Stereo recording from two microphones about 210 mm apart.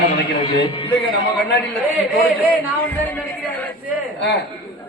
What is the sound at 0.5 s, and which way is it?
Speech, 25° left (ahead or behind).